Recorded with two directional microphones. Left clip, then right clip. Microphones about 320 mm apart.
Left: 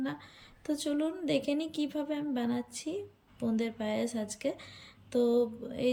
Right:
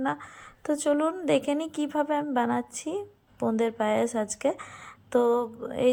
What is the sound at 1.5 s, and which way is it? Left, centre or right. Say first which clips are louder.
Speech: right 4 dB; right.